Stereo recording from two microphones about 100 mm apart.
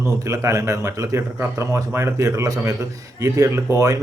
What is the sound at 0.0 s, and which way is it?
Speech, 30° right (ahead or behind).